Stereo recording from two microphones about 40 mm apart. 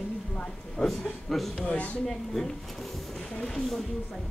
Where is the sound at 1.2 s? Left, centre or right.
Centre.